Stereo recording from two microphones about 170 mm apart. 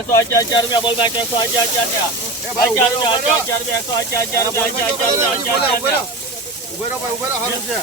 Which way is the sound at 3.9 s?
15° left (ahead or behind).